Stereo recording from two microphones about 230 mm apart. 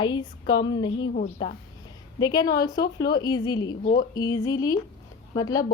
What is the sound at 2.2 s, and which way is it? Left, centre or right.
A woman's voice, centre.